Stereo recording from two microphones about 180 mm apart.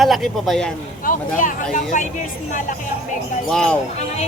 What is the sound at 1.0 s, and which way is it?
Speech, 45° left (ahead or behind).